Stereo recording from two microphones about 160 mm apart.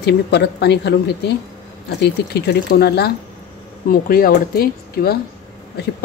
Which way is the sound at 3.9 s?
65° left (ahead or behind).